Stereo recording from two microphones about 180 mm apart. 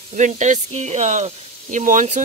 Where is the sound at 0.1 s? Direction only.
40° right (ahead or behind).